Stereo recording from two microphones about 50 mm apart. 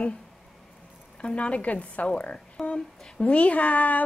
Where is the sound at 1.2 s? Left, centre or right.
Left.